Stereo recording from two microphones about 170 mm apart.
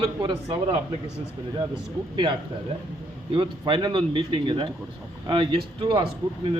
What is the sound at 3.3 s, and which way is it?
A man's voice, 25° right (ahead or behind).